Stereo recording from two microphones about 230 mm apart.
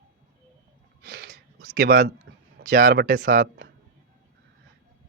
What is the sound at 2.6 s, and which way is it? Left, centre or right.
Speech, right.